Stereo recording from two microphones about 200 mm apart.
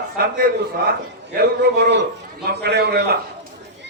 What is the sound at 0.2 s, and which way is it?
Speech, 45° right (ahead or behind).